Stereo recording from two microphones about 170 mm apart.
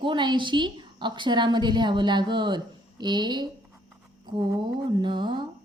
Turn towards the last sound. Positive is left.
turn(degrees=-25)  # may be behind; listen again after turning